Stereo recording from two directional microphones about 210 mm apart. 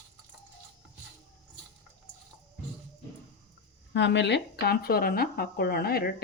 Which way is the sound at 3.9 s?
55° left (ahead or behind).